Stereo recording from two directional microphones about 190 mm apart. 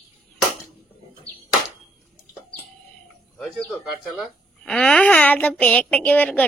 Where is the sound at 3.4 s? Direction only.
5° left (ahead or behind).